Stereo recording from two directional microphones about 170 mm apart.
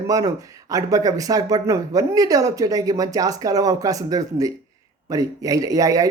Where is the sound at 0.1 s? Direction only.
20° right (ahead or behind).